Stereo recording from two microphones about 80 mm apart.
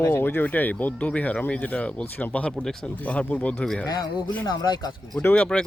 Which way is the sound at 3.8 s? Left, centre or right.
Left.